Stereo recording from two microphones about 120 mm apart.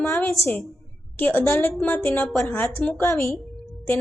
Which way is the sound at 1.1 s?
15° left (ahead or behind).